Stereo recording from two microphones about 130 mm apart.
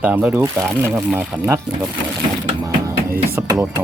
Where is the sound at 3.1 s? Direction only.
15° right (ahead or behind).